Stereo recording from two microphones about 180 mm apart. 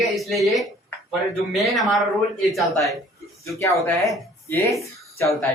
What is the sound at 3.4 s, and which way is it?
Speech, 15° left (ahead or behind).